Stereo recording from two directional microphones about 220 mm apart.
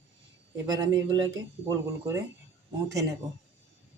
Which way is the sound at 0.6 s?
20° right (ahead or behind).